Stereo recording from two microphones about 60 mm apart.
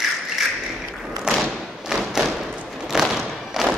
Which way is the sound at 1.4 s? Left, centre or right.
Centre.